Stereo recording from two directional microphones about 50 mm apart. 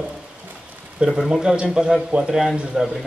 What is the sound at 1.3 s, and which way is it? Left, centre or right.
A man's voice, centre.